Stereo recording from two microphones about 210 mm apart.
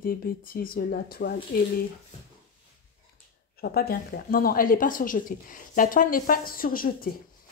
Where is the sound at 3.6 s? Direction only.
45° left (ahead or behind).